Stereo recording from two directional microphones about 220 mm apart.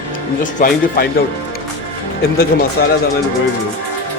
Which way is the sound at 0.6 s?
40° left (ahead or behind).